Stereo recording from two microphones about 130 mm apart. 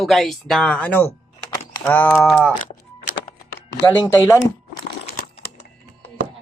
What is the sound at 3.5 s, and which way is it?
Speech, 15° left (ahead or behind).